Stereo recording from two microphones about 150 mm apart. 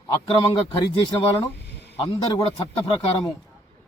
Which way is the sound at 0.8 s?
30° left (ahead or behind).